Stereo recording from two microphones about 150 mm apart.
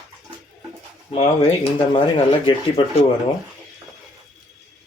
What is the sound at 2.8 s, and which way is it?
Speech, 35° left (ahead or behind).